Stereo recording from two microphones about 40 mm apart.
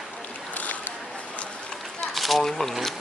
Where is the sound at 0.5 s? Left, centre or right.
Left.